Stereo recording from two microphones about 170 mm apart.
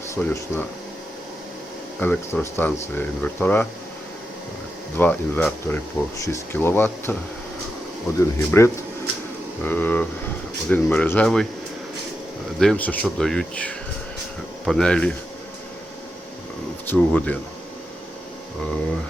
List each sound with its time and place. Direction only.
0.1 s speech: 10° left (ahead or behind)
2.0 s speech: 10° left (ahead or behind)
4.9 s speech: 10° left (ahead or behind)
8.2 s speech: 15° left (ahead or behind)
12.5 s speech: 5° left (ahead or behind)
16.8 s speech: 10° left (ahead or behind)